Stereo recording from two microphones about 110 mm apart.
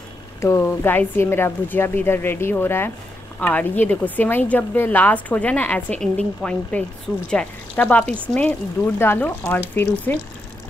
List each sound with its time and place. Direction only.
0.4 s a woman's voice: 25° left (ahead or behind)